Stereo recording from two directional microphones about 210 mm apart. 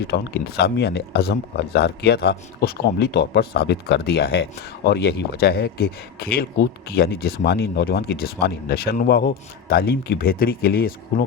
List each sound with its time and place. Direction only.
0.0 s speech: 50° left (ahead or behind)